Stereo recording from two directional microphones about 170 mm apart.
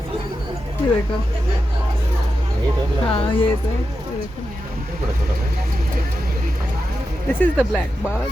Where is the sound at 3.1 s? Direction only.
35° left (ahead or behind).